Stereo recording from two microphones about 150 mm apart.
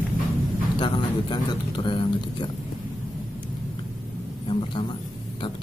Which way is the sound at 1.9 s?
35° left (ahead or behind).